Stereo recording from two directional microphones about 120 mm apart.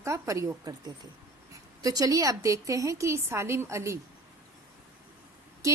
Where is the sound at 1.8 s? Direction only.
30° right (ahead or behind).